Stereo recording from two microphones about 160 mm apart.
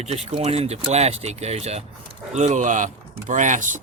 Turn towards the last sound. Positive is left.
turn(degrees=-50)  # may be behind; listen again after turning